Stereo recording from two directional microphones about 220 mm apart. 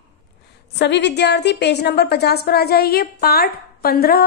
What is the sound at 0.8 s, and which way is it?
A woman's voice, 50° left (ahead or behind).